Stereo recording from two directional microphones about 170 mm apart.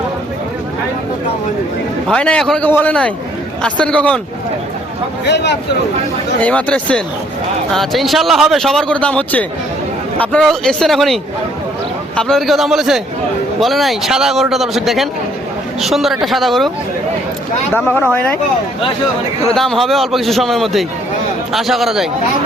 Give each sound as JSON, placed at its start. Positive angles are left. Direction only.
{"t": 2.0, "sound": "a man's voice", "side_deg": 5}
{"t": 5.2, "sound": "speech", "side_deg": 90}
{"t": 6.4, "sound": "a man's voice", "side_deg": 10}
{"t": 18.0, "sound": "a man's voice", "side_deg": 10}
{"t": 19.5, "sound": "speech", "side_deg": 0}